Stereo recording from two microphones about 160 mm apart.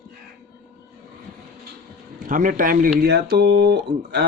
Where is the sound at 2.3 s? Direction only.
60° right (ahead or behind).